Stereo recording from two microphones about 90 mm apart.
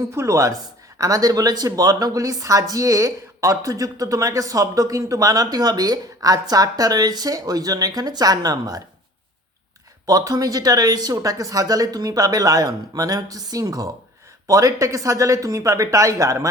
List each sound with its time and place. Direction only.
0.1 s speech: 35° right (ahead or behind)
10.1 s speech: 40° right (ahead or behind)